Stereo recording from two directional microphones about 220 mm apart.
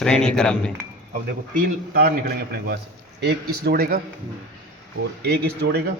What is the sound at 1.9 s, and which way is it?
Speech, 40° right (ahead or behind).